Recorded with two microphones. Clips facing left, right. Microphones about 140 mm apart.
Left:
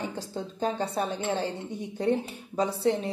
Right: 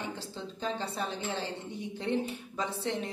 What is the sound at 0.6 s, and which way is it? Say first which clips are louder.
A woman's voice: left 6 dB; 45° left (ahead or behind).